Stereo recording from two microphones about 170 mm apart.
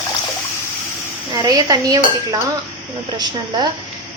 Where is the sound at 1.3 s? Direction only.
25° right (ahead or behind).